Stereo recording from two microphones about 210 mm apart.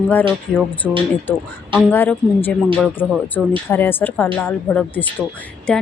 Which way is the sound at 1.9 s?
10° left (ahead or behind).